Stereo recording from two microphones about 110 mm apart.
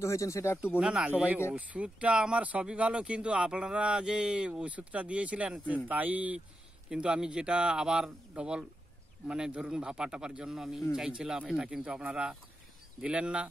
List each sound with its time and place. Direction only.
0.0 s speech: 25° left (ahead or behind)
0.7 s speech: 10° right (ahead or behind)